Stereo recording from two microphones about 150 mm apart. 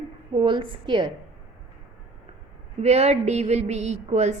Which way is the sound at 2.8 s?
45° right (ahead or behind).